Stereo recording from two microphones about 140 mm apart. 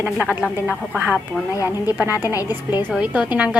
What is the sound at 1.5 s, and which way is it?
Speech, 25° left (ahead or behind).